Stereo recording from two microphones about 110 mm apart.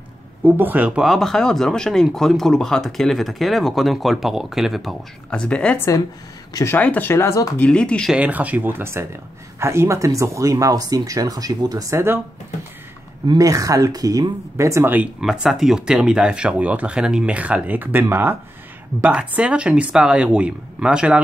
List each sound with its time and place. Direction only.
0.4 s speech: 15° right (ahead or behind)
1.1 s speech: 5° left (ahead or behind)
5.3 s speech: 10° left (ahead or behind)
5.8 s speech: 30° left (ahead or behind)
7.5 s speech: 10° left (ahead or behind)
8.1 s speech: 10° right (ahead or behind)
13.4 s speech: 30° right (ahead or behind)
15.1 s speech: 5° right (ahead or behind)